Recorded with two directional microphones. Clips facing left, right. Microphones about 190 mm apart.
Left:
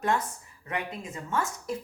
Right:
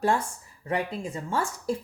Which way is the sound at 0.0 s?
30° right (ahead or behind).